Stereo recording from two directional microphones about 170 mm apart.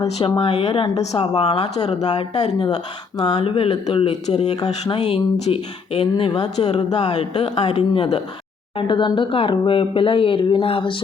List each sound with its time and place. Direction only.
0.2 s speech: 35° left (ahead or behind)
4.5 s speech: 25° left (ahead or behind)
4.9 s speech: 40° left (ahead or behind)